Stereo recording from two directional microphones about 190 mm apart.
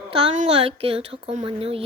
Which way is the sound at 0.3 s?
30° right (ahead or behind).